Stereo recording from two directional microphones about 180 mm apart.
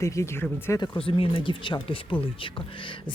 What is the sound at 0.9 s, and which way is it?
Speech, 30° left (ahead or behind).